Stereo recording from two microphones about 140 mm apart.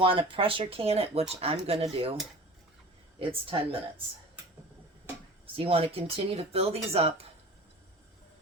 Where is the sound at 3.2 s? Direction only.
40° right (ahead or behind).